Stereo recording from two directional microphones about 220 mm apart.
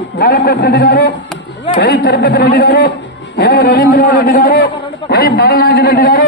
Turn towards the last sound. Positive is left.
turn(degrees=40)  # may be behind; listen again after turning